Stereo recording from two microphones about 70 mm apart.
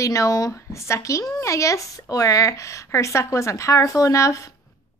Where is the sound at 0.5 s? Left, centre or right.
Left.